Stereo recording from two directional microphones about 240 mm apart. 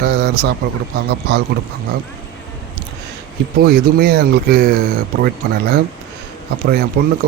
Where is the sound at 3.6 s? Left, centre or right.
Right.